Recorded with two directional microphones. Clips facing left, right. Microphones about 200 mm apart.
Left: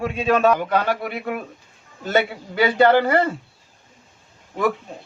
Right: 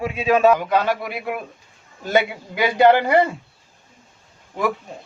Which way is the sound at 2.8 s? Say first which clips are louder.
Right 2 dB; 15° right (ahead or behind).